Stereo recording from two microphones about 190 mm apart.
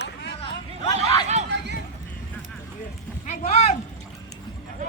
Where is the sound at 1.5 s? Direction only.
60° right (ahead or behind).